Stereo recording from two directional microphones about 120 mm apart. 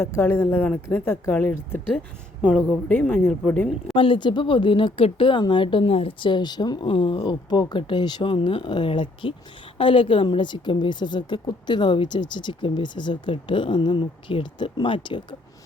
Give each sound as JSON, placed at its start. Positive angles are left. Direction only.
{"t": 0.0, "sound": "a woman's voice", "side_deg": 20}
{"t": 2.6, "sound": "a woman's voice", "side_deg": 15}
{"t": 3.9, "sound": "a woman's voice", "side_deg": 45}